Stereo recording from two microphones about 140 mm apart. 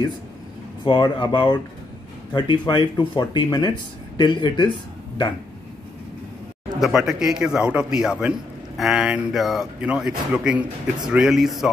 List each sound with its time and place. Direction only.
0.8 s speech: 30° left (ahead or behind)
6.8 s a man's voice: centre (ahead or behind)